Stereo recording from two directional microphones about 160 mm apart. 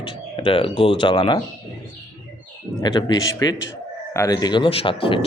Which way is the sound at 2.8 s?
25° left (ahead or behind).